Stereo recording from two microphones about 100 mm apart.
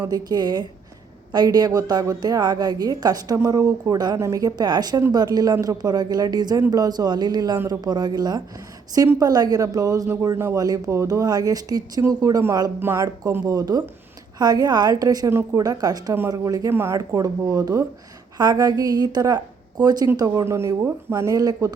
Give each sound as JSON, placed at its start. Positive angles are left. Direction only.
{"t": 0.0, "sound": "a woman's voice", "side_deg": -40}